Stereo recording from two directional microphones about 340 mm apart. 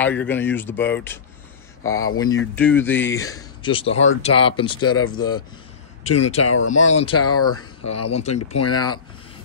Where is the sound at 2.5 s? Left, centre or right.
Centre.